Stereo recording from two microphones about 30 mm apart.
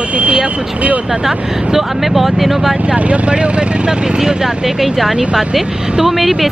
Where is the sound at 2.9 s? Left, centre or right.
Right.